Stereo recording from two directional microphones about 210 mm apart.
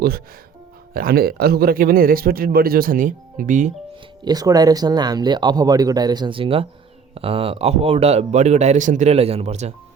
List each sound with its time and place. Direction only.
0.9 s a man's voice: 45° right (ahead or behind)
4.2 s speech: 20° right (ahead or behind)